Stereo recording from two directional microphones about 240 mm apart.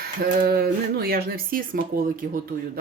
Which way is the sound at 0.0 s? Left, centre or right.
Right.